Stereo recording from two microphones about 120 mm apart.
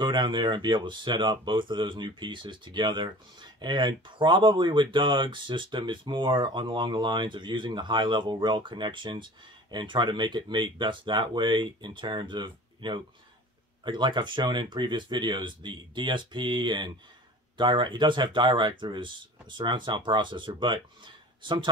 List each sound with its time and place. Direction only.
0.0 s speech: 40° right (ahead or behind)